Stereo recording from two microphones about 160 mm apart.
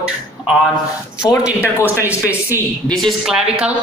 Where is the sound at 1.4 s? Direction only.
15° left (ahead or behind).